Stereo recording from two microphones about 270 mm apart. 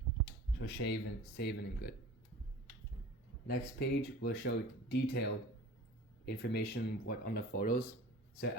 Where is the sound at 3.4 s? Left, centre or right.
Left.